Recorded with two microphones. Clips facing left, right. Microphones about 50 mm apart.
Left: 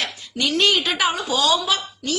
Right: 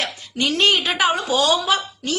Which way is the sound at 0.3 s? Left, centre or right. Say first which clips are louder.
Right 1 dB; right.